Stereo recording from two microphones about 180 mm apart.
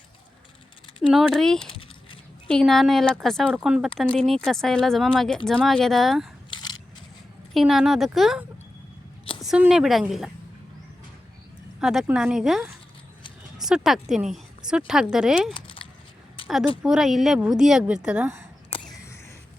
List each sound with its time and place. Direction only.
1.1 s a woman's voice: centre (ahead or behind)
6.5 s crushing: 25° left (ahead or behind)
7.5 s a woman's voice: centre (ahead or behind)
11.8 s a woman's voice: centre (ahead or behind)
16.4 s a sound: 30° left (ahead or behind)
16.8 s a woman's voice: centre (ahead or behind)